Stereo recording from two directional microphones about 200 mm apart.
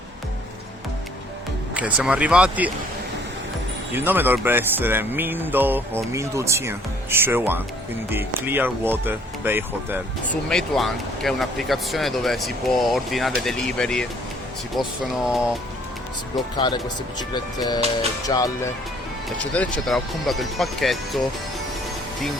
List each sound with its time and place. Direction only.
1.7 s speech: 5° right (ahead or behind)
3.9 s speech: 10° right (ahead or behind)
10.5 s speech: centre (ahead or behind)
17.2 s speech: 20° left (ahead or behind)
19.4 s speech: 5° left (ahead or behind)